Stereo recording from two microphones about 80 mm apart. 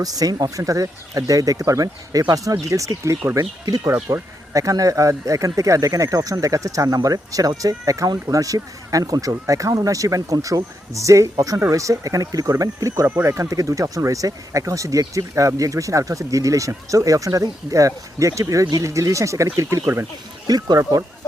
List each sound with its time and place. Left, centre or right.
0.0 s speech: right
13.1 s speech: right
20.5 s speech: right